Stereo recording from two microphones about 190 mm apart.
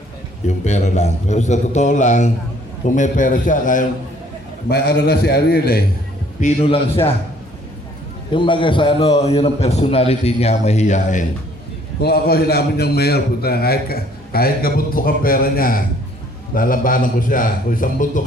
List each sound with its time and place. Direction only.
0.4 s a man's voice: 35° left (ahead or behind)
4.7 s a man's voice: 60° left (ahead or behind)
6.4 s a man's voice: 30° left (ahead or behind)
8.3 s a man's voice: 25° left (ahead or behind)
12.0 s a man's voice: 55° left (ahead or behind)